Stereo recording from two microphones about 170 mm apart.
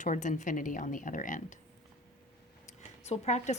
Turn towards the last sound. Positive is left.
turn(degrees=40)  # may be behind; listen again after turning